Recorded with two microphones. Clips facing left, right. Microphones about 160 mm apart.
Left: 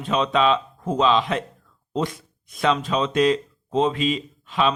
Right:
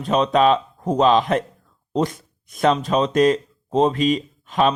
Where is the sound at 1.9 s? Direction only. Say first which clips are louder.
Right 4 dB; 40° right (ahead or behind).